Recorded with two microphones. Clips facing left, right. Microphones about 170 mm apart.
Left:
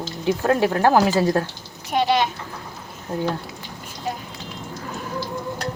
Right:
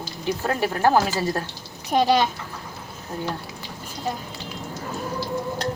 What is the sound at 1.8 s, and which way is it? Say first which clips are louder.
Speech: right 1 dB; 35° right (ahead or behind).